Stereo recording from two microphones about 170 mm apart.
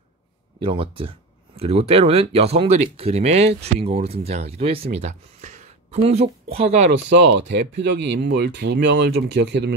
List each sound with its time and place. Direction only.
0.6 s speech: 30° right (ahead or behind)
6.9 s speech: 90° right